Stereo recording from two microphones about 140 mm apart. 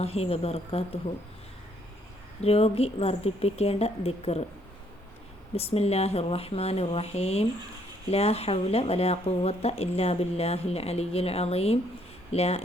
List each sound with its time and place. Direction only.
0.0 s speech: 45° left (ahead or behind)
2.4 s speech: 45° left (ahead or behind)
5.5 s speech: 45° left (ahead or behind)